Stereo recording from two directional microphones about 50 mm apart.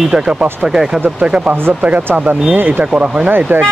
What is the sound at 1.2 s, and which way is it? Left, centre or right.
Speech, right.